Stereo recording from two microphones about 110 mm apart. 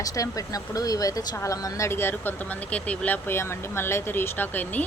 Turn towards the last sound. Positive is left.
turn(degrees=15)  # may be behind; listen again after turning